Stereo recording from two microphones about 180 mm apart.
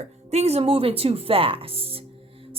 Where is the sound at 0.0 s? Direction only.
35° right (ahead or behind).